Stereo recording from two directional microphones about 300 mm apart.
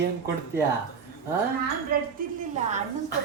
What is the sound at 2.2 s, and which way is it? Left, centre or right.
Speech, right.